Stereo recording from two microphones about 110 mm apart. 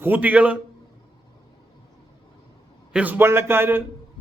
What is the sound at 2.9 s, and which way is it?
Speech, 15° right (ahead or behind).